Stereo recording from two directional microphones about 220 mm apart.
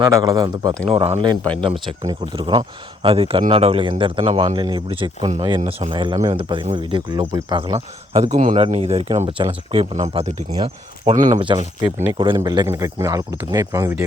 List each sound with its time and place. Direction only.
0.0 s speech: 15° right (ahead or behind)
0.9 s speech: 25° right (ahead or behind)
11.3 s speech: 20° right (ahead or behind)